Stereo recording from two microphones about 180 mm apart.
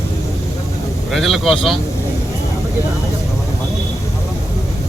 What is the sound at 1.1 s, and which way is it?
Speech, centre (ahead or behind).